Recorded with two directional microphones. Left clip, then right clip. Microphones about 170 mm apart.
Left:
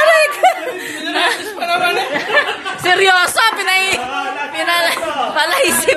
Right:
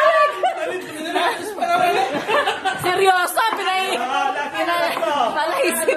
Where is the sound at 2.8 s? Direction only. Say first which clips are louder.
Left 6 dB; 5° right (ahead or behind).